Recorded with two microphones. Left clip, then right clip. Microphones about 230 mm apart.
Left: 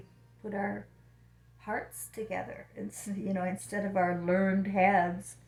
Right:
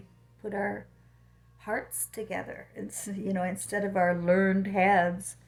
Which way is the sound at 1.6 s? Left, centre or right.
Right.